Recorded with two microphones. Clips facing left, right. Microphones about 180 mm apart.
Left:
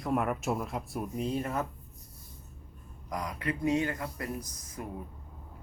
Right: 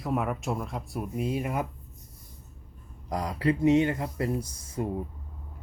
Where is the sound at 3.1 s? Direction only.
30° right (ahead or behind).